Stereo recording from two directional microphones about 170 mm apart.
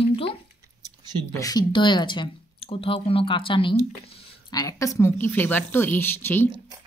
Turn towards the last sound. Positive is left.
turn(degrees=15)  # may be behind; listen again after turning